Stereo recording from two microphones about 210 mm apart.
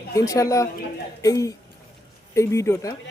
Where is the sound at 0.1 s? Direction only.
15° left (ahead or behind).